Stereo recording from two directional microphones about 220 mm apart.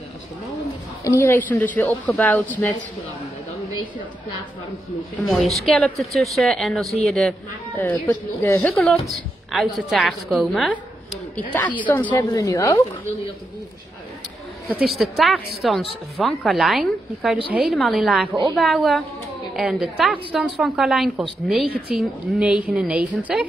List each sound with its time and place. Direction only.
1.0 s a woman's voice: 10° left (ahead or behind)
5.6 s a woman's voice: centre (ahead or behind)
14.8 s a woman's voice: centre (ahead or behind)